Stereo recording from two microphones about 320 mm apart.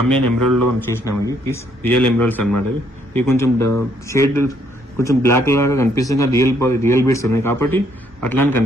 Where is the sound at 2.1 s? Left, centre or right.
Centre.